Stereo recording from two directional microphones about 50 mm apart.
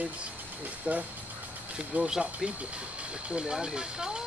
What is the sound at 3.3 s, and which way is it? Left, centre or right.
Speech, centre.